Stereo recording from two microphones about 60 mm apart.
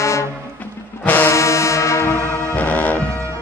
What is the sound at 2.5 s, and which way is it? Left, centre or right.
Music, left.